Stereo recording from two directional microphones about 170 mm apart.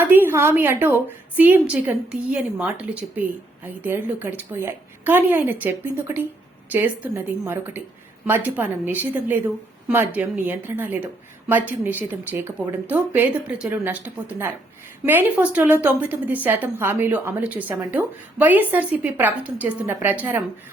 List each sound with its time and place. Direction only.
0.0 s a woman's voice: 10° right (ahead or behind)